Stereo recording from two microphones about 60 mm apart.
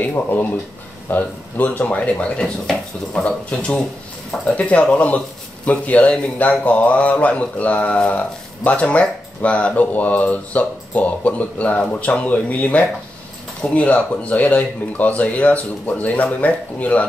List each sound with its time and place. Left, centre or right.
0.0 s speech: left
1.9 s speech: centre
2.4 s speech: centre; by 17.0 s left